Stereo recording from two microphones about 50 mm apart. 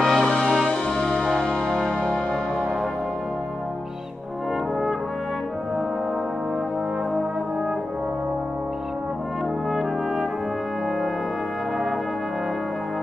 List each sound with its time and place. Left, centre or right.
0.0 s music: centre
0.7 s music: centre
1.2 s music: centre